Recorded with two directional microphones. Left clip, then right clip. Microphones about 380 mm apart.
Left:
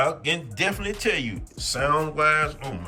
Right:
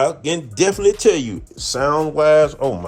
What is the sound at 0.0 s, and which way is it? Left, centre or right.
Speech, centre.